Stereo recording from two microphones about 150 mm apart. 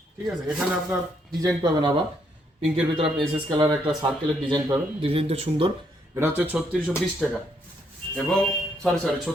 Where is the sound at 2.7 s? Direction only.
35° right (ahead or behind).